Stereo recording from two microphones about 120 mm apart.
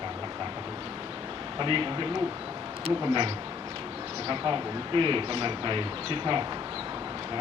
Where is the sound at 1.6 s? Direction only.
45° right (ahead or behind).